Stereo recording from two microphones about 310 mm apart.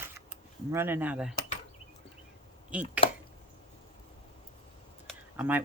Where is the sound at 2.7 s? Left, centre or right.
Centre.